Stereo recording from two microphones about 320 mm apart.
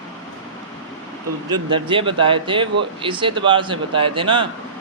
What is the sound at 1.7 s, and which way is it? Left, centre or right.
Speech, centre.